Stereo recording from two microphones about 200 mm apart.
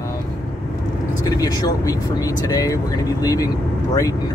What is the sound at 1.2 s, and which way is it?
Speech, 20° left (ahead or behind).